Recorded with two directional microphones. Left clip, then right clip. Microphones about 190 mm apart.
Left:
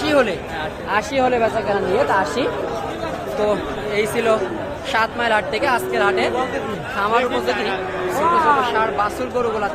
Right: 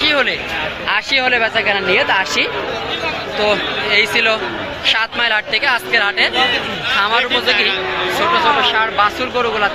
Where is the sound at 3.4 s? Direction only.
20° left (ahead or behind).